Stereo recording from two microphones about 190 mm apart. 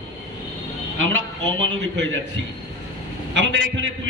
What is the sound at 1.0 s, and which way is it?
A man's voice, 85° right.